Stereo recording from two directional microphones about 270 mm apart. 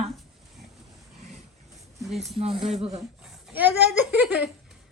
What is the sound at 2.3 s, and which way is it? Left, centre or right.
Speech, centre.